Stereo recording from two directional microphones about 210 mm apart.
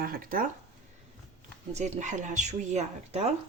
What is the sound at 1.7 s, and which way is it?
Speech, 35° right (ahead or behind).